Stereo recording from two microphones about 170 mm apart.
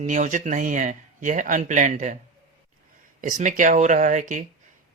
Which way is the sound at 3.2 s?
50° right (ahead or behind).